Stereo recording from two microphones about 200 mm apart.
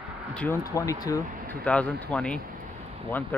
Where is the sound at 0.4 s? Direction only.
15° left (ahead or behind).